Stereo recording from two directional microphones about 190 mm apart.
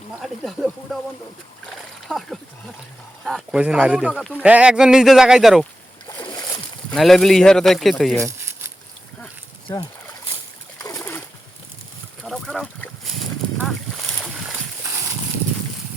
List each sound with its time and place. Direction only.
0.2 s speech: centre (ahead or behind)
1.7 s splash: centre (ahead or behind)
3.2 s speech: centre (ahead or behind)
4.4 s speech: 5° right (ahead or behind)
6.1 s splash: 20° left (ahead or behind)
6.9 s speech: centre (ahead or behind)
8.2 s a sound: 15° right (ahead or behind)
9.6 s speech: 25° left (ahead or behind)
10.8 s bird: 15° left (ahead or behind)
12.2 s boat: centre (ahead or behind)
13.6 s a sound: centre (ahead or behind)